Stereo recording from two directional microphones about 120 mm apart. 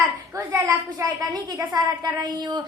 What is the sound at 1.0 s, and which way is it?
A child's voice, 25° right (ahead or behind).